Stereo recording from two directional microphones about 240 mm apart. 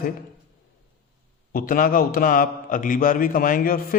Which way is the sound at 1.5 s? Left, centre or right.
Left.